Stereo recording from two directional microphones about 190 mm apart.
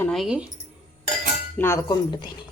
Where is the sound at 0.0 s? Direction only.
Centre (ahead or behind).